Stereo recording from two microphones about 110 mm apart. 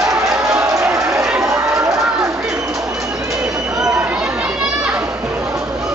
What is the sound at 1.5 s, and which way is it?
Run, 30° right (ahead or behind).